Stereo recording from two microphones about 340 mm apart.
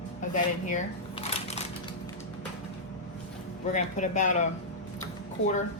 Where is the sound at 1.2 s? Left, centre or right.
Centre.